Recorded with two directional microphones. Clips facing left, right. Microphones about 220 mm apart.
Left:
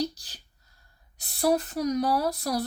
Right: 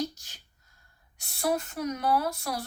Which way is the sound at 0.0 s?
35° left (ahead or behind).